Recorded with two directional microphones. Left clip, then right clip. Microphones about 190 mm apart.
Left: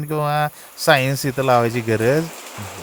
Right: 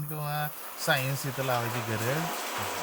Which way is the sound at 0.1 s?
55° left (ahead or behind).